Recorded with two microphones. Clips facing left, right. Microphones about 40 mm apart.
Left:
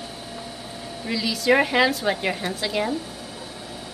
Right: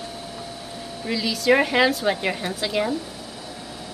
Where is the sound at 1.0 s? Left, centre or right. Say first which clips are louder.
Right 1 dB; centre.